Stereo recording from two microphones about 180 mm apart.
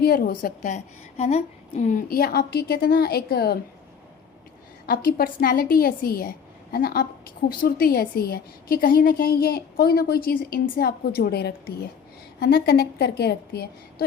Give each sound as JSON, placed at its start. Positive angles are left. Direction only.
{"t": 0.0, "sound": "a woman's voice", "side_deg": 55}
{"t": 4.9, "sound": "a woman's voice", "side_deg": 50}